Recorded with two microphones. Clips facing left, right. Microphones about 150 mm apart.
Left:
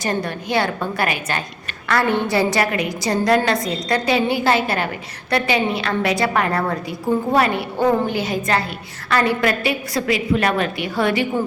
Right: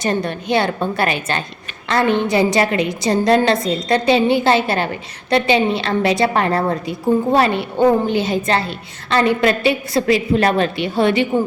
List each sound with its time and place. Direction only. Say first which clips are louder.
0.0 s a woman's voice: right 3 dB; 25° right (ahead or behind)